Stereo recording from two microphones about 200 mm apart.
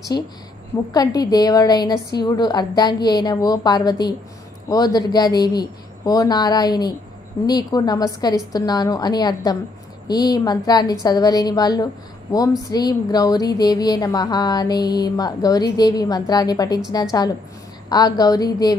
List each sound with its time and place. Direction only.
0.1 s a woman's voice: 15° left (ahead or behind)